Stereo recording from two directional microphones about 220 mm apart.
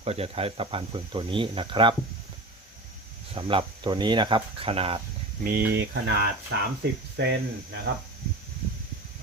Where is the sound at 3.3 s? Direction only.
25° right (ahead or behind).